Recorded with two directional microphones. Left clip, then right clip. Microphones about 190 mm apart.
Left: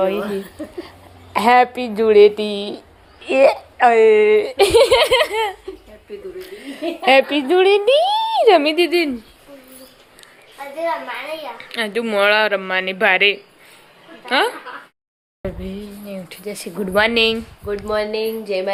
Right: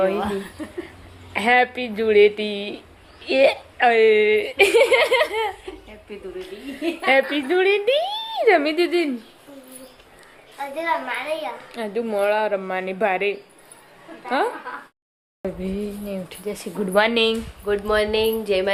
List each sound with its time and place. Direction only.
1.3 s a woman's voice: 20° left (ahead or behind)
3.2 s speech: 5° left (ahead or behind)
7.0 s a woman's voice: 25° left (ahead or behind)
11.3 s a woman's voice: 5° left (ahead or behind)
15.6 s speech: 20° right (ahead or behind)
16.5 s a woman's voice: centre (ahead or behind)
17.7 s speech: 5° right (ahead or behind)